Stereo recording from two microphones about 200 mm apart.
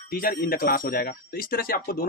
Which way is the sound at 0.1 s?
45° left (ahead or behind).